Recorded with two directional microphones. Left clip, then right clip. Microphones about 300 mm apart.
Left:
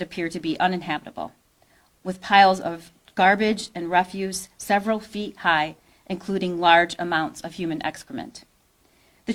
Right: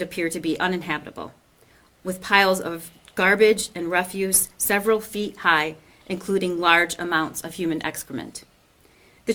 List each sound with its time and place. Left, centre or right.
0.0 s speech: left